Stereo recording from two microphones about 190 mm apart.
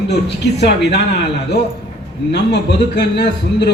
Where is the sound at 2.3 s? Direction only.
65° left (ahead or behind).